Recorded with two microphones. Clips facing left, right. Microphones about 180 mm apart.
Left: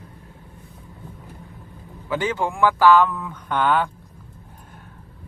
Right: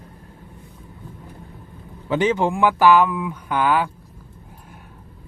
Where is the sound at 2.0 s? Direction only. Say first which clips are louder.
Right 5 dB; 20° right (ahead or behind).